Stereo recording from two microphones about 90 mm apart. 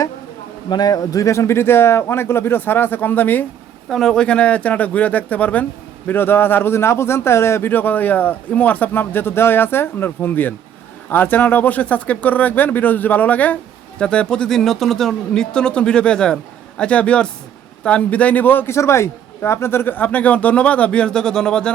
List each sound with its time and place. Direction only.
0.7 s a man's voice: 50° left (ahead or behind); by 3.4 s 20° left (ahead or behind)
3.8 s a man's voice: 5° left (ahead or behind)